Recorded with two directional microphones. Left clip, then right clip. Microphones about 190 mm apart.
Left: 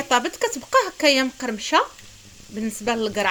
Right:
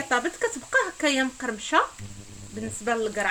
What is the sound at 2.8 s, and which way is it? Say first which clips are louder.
Speech: left 3 dB; 45° left (ahead or behind).